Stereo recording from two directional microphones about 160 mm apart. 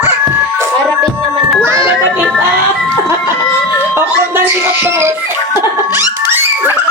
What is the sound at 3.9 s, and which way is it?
Music, 10° right (ahead or behind).